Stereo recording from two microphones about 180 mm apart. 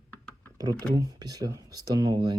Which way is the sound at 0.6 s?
20° right (ahead or behind).